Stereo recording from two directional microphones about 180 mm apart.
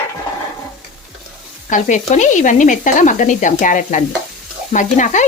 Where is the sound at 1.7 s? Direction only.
40° left (ahead or behind).